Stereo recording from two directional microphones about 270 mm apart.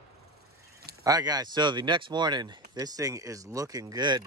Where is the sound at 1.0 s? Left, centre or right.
Centre.